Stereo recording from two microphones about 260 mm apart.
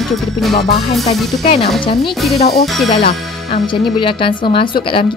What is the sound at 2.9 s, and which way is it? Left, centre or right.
Speech, left.